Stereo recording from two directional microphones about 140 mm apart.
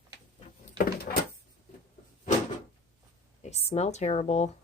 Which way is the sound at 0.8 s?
90° left.